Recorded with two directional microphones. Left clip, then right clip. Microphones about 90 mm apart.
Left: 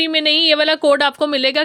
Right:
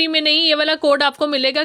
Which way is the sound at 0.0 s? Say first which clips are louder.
Left 1 dB; centre (ahead or behind).